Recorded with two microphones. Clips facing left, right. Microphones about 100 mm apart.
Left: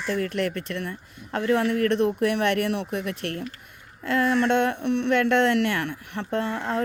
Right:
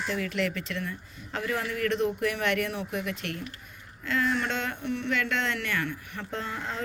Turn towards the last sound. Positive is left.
turn(degrees=70)  # may be behind; listen again after turning